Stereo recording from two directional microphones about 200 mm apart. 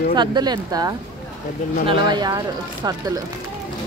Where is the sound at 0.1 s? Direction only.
20° right (ahead or behind).